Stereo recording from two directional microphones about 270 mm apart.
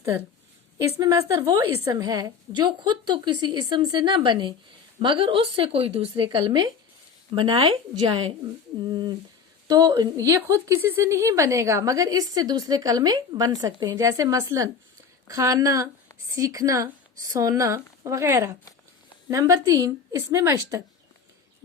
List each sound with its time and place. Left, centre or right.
0.8 s a woman's voice: centre